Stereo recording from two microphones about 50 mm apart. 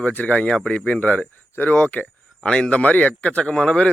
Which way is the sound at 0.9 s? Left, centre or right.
Left.